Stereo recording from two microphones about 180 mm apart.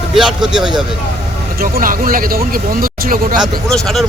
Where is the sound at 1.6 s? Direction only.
50° right (ahead or behind).